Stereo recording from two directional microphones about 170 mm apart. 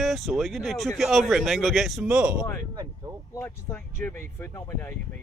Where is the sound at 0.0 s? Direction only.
Centre (ahead or behind).